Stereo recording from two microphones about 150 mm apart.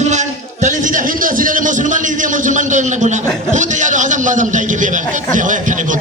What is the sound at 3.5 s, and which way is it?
A man's voice, 55° right (ahead or behind).